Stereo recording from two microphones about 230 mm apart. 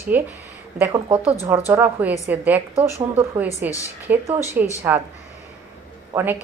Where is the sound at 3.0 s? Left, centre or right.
Right.